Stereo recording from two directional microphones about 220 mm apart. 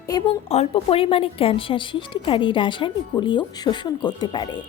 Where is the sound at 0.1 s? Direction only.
25° left (ahead or behind).